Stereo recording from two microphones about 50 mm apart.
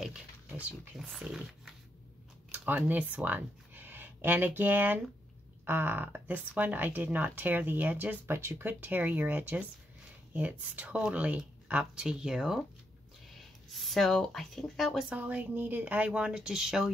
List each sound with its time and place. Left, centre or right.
0.9 s speech: centre
2.7 s speech: right
8.3 s speech: right
8.6 s speech: right
11.8 s speech: centre
13.7 s speech: centre
15.0 s speech: right
16.2 s speech: centre